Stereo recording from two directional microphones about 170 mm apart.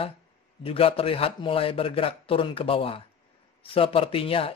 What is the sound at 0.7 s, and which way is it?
Speech, 35° left (ahead or behind).